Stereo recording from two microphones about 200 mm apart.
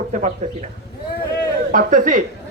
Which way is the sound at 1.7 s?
40° right (ahead or behind).